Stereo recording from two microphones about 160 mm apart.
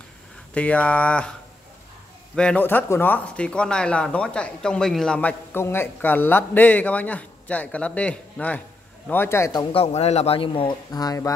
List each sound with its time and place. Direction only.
0.6 s speech: 10° left (ahead or behind)
2.3 s a man's voice: 5° left (ahead or behind)